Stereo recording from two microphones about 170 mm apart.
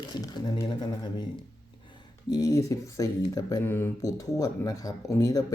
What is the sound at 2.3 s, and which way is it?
Speech, 20° left (ahead or behind).